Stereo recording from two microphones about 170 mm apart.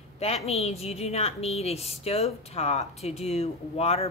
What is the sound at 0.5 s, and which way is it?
A woman's voice, 40° left (ahead or behind).